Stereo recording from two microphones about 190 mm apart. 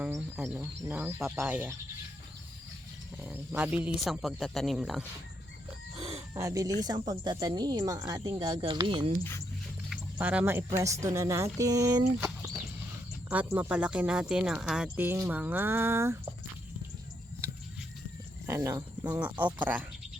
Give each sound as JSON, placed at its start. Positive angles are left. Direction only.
{"t": 0.0, "sound": "speech", "side_deg": -10}
{"t": 3.2, "sound": "speech", "side_deg": -5}
{"t": 6.0, "sound": "chicken", "side_deg": -30}
{"t": 6.3, "sound": "speech", "side_deg": -15}
{"t": 9.9, "sound": "speech", "side_deg": -5}
{"t": 18.4, "sound": "speech", "side_deg": -15}